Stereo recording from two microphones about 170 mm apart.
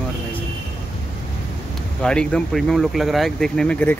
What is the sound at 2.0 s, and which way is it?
Speech, 5° left (ahead or behind).